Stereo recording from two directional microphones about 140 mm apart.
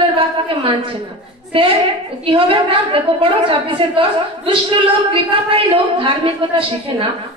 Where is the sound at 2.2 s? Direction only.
40° right (ahead or behind).